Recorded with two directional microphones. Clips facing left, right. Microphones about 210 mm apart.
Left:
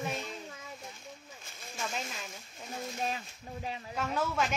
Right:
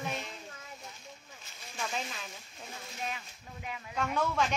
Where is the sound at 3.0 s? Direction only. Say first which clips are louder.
Left 1 dB; 35° left (ahead or behind).